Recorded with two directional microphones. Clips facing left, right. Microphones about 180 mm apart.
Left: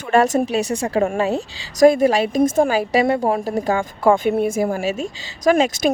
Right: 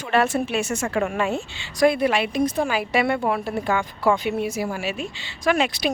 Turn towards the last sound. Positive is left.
turn(degrees=45)  # may be behind; listen again after turning